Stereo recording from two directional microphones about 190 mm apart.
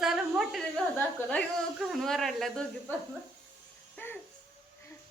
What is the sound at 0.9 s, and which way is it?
A woman's voice, 5° left (ahead or behind).